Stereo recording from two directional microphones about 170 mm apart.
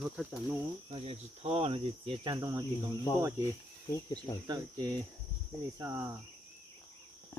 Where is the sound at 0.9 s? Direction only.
35° right (ahead or behind); by 2.6 s 20° right (ahead or behind).